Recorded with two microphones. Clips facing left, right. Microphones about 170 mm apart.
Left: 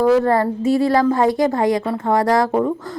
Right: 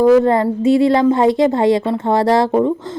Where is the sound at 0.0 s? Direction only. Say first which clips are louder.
Right 4 dB; 20° right (ahead or behind).